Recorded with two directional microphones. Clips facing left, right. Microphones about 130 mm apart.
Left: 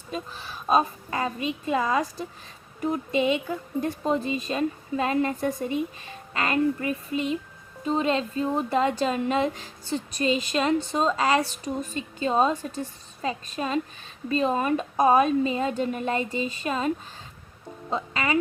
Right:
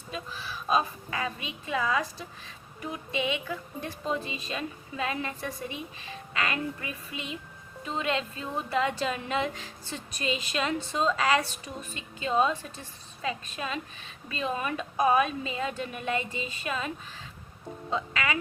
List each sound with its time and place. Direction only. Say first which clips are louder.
0.7 s a woman's voice: left 5 dB; 40° left (ahead or behind)
17.9 s a woman's voice: left 3 dB; 35° left (ahead or behind)